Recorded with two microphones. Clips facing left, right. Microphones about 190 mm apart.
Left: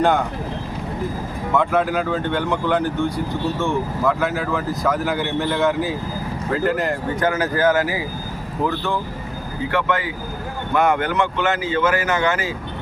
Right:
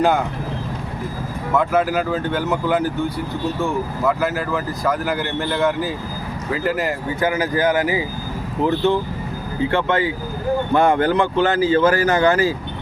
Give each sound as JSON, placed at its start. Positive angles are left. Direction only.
{"t": 1.5, "sound": "speech", "side_deg": 0}
{"t": 9.7, "sound": "speech", "side_deg": -30}